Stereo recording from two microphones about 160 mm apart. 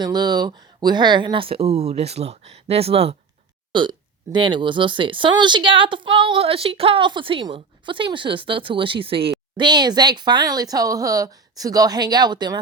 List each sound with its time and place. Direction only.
0.0 s speech: 25° right (ahead or behind)